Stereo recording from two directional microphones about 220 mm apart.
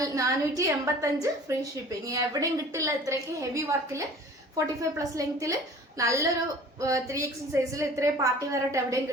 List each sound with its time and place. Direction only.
0.0 s a woman's voice: 15° right (ahead or behind)